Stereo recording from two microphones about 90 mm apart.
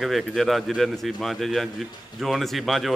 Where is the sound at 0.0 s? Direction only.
Centre (ahead or behind).